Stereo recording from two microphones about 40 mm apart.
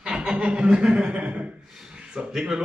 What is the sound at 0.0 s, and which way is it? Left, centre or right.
Speech, centre.